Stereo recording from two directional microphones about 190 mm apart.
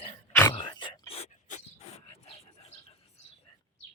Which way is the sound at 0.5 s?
25° left (ahead or behind).